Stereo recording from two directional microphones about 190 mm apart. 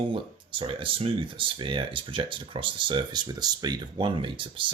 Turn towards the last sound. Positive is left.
turn(degrees=-25)  # may be behind; listen again after turning